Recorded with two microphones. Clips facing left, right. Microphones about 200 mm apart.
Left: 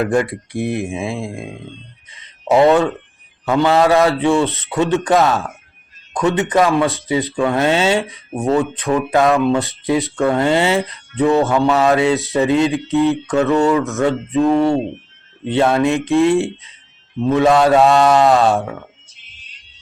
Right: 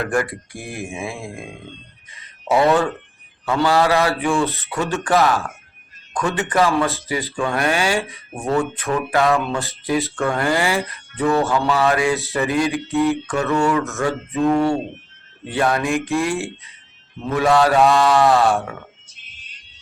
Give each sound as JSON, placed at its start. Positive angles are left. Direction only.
{"t": 0.1, "sound": "speech", "side_deg": 20}